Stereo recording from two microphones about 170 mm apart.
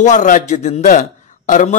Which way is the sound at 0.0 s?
45° left (ahead or behind).